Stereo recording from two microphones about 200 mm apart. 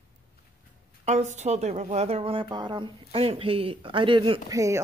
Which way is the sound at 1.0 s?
35° right (ahead or behind).